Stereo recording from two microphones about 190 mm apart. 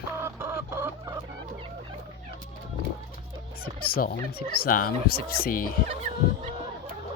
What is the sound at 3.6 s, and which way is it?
Speech, 50° left (ahead or behind).